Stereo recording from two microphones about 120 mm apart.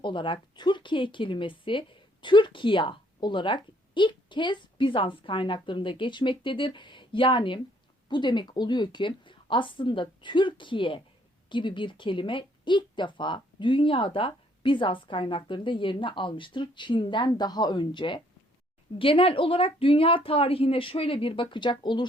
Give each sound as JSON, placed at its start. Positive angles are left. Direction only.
{"t": 0.0, "sound": "a woman's voice", "side_deg": 45}